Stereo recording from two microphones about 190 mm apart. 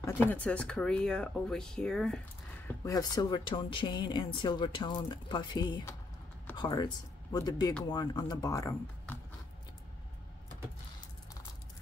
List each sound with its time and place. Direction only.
0.0 s speech: 10° left (ahead or behind)
2.8 s speech: 20° left (ahead or behind)